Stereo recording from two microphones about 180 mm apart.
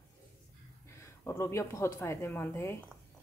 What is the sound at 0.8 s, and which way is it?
Speech, 15° left (ahead or behind).